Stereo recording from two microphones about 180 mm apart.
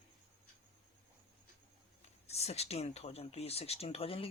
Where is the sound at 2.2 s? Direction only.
35° left (ahead or behind).